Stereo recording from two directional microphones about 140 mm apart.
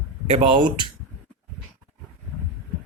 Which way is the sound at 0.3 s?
40° right (ahead or behind).